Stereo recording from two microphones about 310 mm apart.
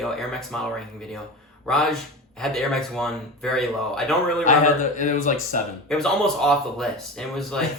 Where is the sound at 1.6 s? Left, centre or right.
Centre.